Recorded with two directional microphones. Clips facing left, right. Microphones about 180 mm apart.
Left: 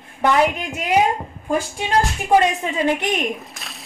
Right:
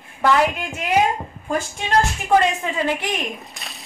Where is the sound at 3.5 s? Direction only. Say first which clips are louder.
Even; centre (ahead or behind).